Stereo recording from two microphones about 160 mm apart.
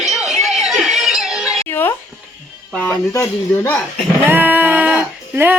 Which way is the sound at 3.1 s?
20° left (ahead or behind).